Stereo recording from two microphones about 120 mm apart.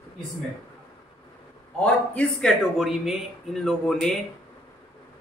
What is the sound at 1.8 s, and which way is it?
A man's voice, 10° left (ahead or behind).